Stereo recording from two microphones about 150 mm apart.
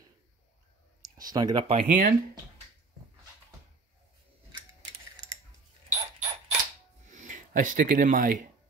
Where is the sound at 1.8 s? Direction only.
65° right (ahead or behind).